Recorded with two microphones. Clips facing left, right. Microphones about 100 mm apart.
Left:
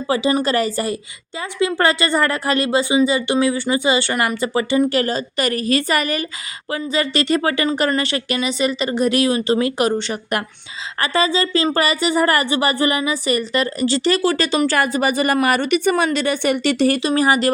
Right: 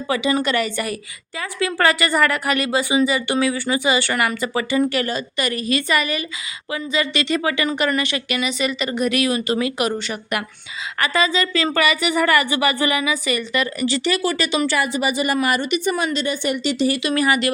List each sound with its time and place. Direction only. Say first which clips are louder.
0.1 s a woman's voice: left 2 dB; 30° left (ahead or behind); by 17.0 s 55° left (ahead or behind)
17.0 s speech: left 3 dB; 35° left (ahead or behind)